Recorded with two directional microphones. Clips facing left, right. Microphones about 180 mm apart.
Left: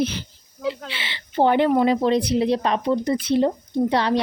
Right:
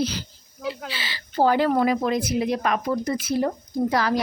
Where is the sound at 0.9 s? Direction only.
25° left (ahead or behind).